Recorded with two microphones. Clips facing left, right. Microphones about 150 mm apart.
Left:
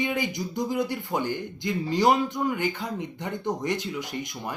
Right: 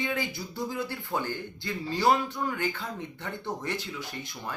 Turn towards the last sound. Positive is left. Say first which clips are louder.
# left 5 dB
turn(degrees=15)  # may be behind; listen again after turning